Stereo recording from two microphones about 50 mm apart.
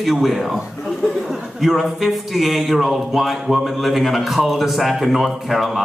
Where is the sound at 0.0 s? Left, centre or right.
Centre.